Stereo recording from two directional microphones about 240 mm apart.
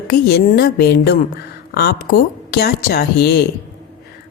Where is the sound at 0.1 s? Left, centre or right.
Left.